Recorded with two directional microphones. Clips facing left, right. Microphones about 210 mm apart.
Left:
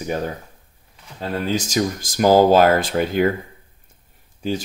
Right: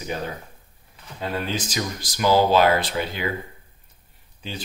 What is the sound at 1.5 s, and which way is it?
Speech, 45° left (ahead or behind).